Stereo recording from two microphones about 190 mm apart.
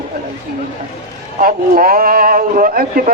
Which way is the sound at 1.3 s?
50° right (ahead or behind).